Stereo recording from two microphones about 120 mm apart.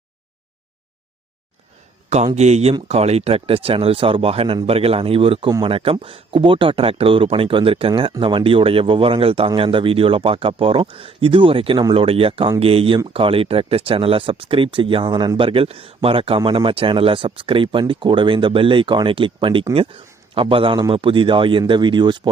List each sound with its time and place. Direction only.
2.0 s a man's voice: 65° right (ahead or behind); by 22.3 s 40° right (ahead or behind)